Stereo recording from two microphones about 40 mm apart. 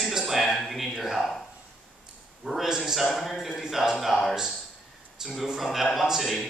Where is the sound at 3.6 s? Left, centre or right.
Centre.